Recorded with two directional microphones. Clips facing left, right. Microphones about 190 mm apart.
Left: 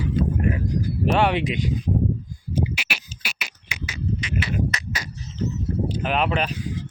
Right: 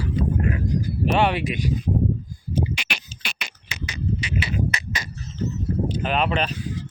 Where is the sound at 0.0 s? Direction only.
20° left (ahead or behind).